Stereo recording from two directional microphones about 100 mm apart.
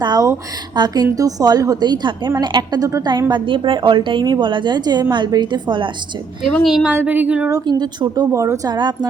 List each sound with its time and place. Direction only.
0.0 s a woman's voice: 45° right (ahead or behind)
6.7 s a woman's voice: 5° right (ahead or behind)
6.9 s speech: 15° right (ahead or behind)
7.6 s a woman's voice: 45° right (ahead or behind)
8.3 s speech: 30° right (ahead or behind)
8.7 s a woman's voice: 45° right (ahead or behind)